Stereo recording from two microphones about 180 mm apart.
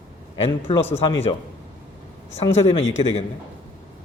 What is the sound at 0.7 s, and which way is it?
Speech, 35° left (ahead or behind).